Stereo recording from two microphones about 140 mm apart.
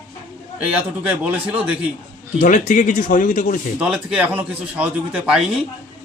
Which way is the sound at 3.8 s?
10° right (ahead or behind).